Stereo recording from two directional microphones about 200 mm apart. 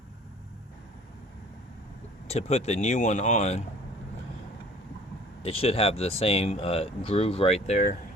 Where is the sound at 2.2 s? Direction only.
30° left (ahead or behind).